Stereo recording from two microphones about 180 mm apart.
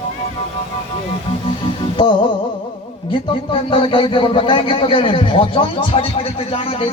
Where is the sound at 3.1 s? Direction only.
30° left (ahead or behind).